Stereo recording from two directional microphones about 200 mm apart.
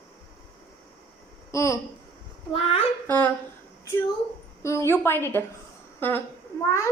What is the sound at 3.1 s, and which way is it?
Speech, 10° left (ahead or behind).